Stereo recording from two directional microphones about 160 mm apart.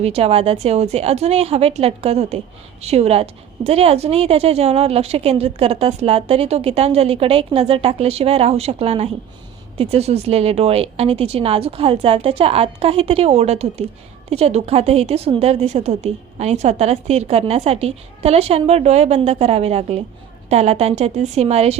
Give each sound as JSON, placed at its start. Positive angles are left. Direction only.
{"t": 0.0, "sound": "a woman's voice", "side_deg": -40}